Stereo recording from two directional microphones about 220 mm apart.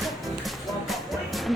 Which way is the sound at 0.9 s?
Centre (ahead or behind).